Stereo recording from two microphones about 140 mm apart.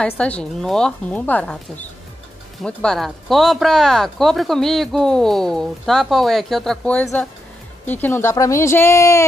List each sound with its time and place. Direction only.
0.0 s a woman's voice: 10° left (ahead or behind)